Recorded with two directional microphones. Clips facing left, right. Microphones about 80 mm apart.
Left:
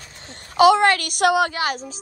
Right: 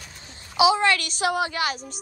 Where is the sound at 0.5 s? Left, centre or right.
Left.